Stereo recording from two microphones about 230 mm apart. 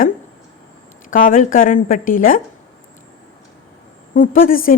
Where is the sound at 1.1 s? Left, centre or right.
Left.